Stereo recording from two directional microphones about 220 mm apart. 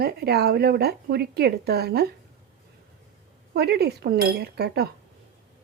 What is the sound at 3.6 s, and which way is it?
Speech, 45° right (ahead or behind).